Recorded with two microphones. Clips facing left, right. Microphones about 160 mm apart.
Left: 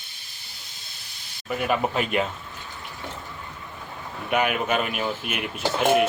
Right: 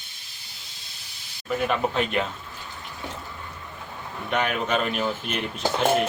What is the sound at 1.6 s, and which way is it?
Speech, 5° left (ahead or behind).